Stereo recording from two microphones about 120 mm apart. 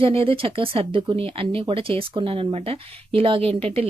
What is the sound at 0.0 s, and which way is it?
Speech, 50° right (ahead or behind).